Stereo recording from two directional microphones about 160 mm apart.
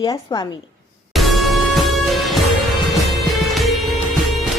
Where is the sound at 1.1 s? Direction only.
Centre (ahead or behind).